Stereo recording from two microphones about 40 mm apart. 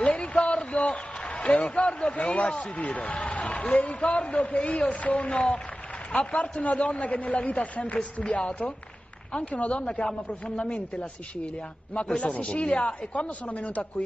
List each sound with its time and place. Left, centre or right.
0.0 s a sound: left
3.1 s a man's voice: left
9.8 s a man's voice: left